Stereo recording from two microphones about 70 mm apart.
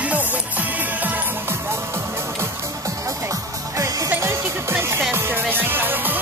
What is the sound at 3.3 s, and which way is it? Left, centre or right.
Music, right.